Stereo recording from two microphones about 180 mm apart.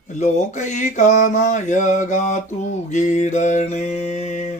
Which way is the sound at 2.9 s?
40° left (ahead or behind).